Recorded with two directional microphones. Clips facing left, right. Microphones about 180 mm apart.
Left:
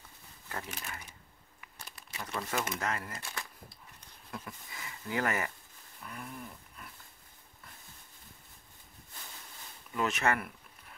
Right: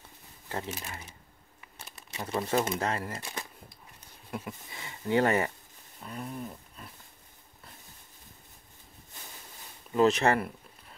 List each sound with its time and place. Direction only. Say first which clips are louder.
0.5 s speech: right 5 dB; 25° right (ahead or behind)
3.2 s shuffling cards: right 3 dB; 20° right (ahead or behind)
4.3 s speech: right 6 dB; 25° right (ahead or behind)
5.9 s wild animals: right 6 dB; 25° right (ahead or behind)
9.9 s speech: right 7 dB; 35° right (ahead or behind)